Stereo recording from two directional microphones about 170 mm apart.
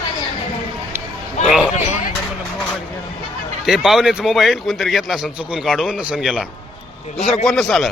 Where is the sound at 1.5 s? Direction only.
5° right (ahead or behind).